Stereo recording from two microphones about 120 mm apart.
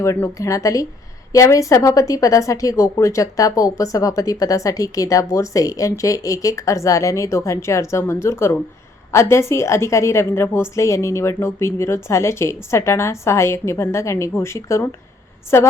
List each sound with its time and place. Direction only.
0.0 s a woman's voice: 25° left (ahead or behind)